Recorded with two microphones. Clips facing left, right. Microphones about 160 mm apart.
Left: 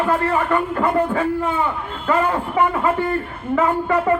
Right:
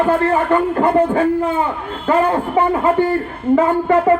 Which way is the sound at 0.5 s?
30° right (ahead or behind).